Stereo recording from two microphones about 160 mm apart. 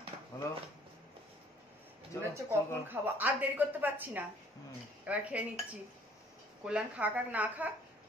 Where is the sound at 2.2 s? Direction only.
15° right (ahead or behind).